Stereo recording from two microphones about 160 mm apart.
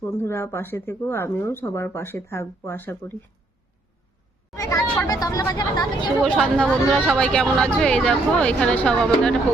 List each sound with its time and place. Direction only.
0.0 s speech: 15° left (ahead or behind)
4.5 s speech: 20° left (ahead or behind)
6.2 s speech: 5° left (ahead or behind)